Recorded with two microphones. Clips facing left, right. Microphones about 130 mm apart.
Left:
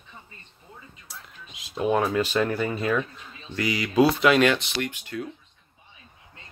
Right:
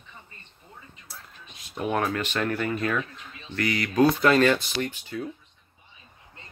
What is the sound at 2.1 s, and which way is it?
Speech, 20° left (ahead or behind).